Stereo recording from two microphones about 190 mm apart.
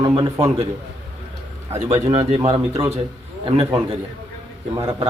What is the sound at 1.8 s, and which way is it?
Speech, 35° right (ahead or behind).